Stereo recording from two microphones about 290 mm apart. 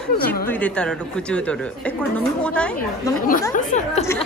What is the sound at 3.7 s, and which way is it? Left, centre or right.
Speech, left.